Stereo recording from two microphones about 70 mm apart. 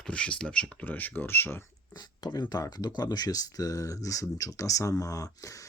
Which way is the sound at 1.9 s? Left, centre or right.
Left.